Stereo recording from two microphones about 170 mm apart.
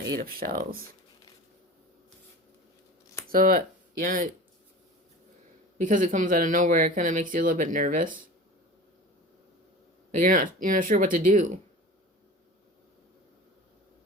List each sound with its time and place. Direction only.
0.0 s speech: 60° right (ahead or behind)
3.3 s speech: 55° right (ahead or behind)
5.7 s speech: 50° right (ahead or behind)
10.1 s speech: 50° right (ahead or behind)